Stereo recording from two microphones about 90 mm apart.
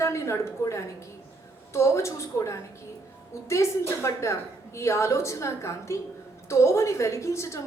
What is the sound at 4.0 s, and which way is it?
A woman's voice, 30° left (ahead or behind).